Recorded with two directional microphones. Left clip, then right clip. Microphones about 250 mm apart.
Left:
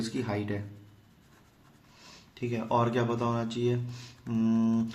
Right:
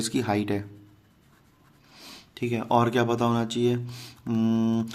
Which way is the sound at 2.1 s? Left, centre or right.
Right.